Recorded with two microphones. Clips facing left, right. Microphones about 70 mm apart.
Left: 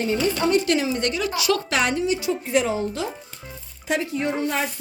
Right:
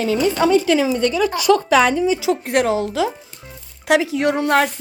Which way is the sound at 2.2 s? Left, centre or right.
Right.